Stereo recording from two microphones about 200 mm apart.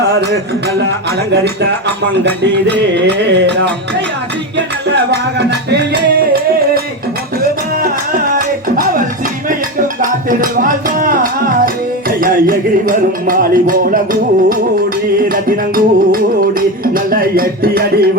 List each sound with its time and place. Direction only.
2.2 s music: 60° right (ahead or behind)
5.5 s music: 55° right (ahead or behind)
7.8 s music: 45° right (ahead or behind)